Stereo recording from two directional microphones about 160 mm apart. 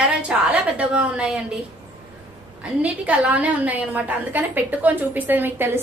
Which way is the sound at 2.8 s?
10° right (ahead or behind).